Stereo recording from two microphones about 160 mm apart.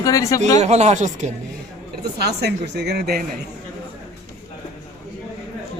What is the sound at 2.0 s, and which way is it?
Speech, 90° right.